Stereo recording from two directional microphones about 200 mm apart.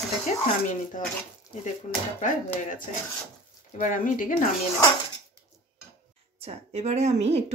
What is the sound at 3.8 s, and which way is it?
Speech, 40° left (ahead or behind).